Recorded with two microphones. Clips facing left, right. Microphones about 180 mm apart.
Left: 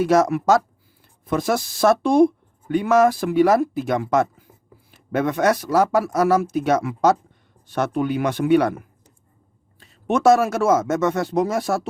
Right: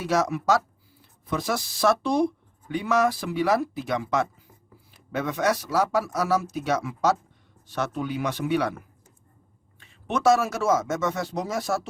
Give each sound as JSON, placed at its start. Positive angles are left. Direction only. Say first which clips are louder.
{"t": 0.0, "sound": "speech", "louder": "left 7 dB", "side_deg": 50}
{"t": 9.8, "sound": "speech", "louder": "left 5 dB", "side_deg": 50}